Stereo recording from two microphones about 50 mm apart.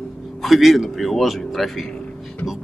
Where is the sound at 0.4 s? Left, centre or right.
Centre.